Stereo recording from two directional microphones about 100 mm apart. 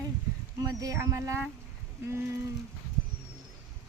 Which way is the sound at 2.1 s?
25° right (ahead or behind).